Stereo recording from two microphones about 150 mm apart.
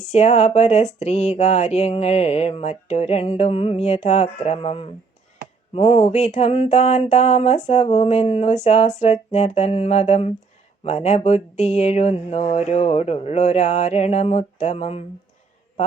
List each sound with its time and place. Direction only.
0.0 s speech: 50° left (ahead or behind)